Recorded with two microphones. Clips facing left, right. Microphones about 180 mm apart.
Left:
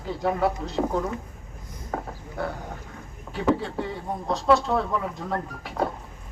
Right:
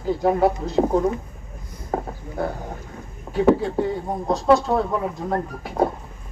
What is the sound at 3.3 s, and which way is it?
Speech, 40° right (ahead or behind).